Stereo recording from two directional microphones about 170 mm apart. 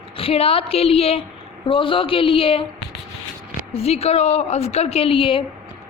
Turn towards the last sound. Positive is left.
turn(degrees=30)  # may be behind; listen again after turning